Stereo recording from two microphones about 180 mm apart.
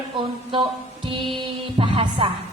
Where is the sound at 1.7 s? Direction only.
30° right (ahead or behind).